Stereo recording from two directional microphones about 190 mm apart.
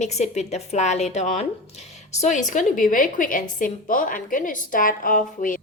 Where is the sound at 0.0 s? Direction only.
35° left (ahead or behind).